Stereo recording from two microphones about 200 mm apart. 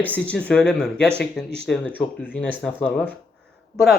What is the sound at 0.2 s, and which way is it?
Speech, 5° left (ahead or behind).